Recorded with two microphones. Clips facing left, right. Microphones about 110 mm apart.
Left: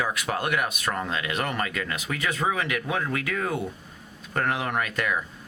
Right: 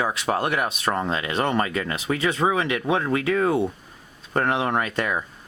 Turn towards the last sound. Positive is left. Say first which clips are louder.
# right 3 dB
turn(degrees=-30)  # may be behind; listen again after turning